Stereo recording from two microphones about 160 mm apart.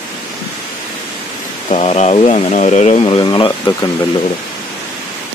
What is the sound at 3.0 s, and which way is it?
Speech, 30° left (ahead or behind).